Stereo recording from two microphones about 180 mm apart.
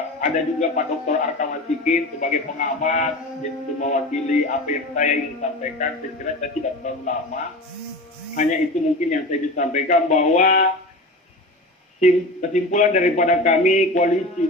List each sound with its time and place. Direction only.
0.2 s music: 45° left (ahead or behind)
9.0 s a man's voice: 40° left (ahead or behind)
11.9 s a man's voice: 40° left (ahead or behind)